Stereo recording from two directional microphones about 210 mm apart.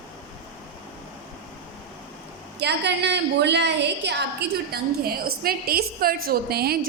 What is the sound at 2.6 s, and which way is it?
A woman's voice, 55° right (ahead or behind).